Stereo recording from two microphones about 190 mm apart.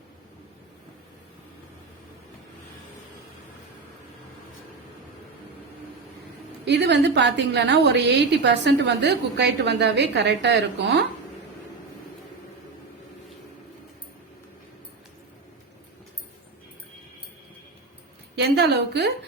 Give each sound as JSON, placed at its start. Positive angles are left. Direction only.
{"t": 6.7, "sound": "a woman's voice", "side_deg": -65}
{"t": 18.3, "sound": "a woman's voice", "side_deg": -60}